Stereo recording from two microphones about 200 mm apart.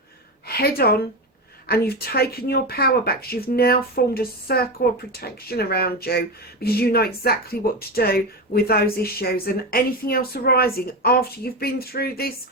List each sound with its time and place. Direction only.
0.4 s a woman's voice: 50° left (ahead or behind)